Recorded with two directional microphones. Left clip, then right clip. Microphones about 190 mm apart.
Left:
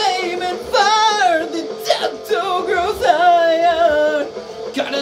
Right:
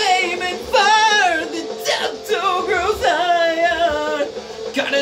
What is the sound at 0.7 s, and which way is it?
Female singing, 20° right (ahead or behind).